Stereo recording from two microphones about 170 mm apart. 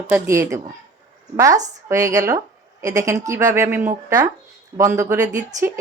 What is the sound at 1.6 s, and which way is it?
A woman's voice, 20° right (ahead or behind).